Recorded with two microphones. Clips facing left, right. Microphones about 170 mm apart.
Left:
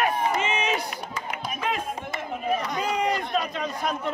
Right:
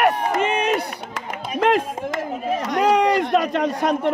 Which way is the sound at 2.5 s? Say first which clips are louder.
Right 11 dB; 85° right.